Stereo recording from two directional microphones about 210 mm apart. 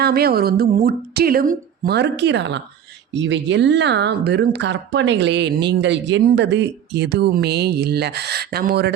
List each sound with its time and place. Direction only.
0.0 s speech: 50° right (ahead or behind)